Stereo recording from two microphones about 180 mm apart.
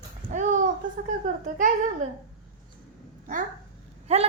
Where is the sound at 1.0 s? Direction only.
45° right (ahead or behind).